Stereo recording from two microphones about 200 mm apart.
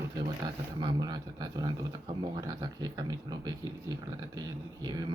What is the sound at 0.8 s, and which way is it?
Speech, 20° right (ahead or behind).